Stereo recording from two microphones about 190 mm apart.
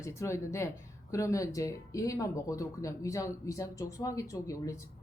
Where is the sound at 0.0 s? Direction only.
15° left (ahead or behind).